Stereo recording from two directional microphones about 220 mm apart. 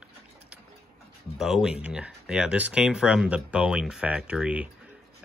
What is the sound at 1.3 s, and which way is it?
Speech, centre (ahead or behind).